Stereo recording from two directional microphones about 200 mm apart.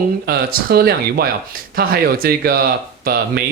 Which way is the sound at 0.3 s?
50° right (ahead or behind).